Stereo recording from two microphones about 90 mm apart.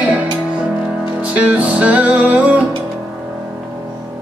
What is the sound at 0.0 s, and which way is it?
Music, 15° right (ahead or behind).